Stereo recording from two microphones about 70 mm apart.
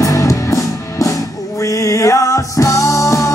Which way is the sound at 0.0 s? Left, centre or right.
Left.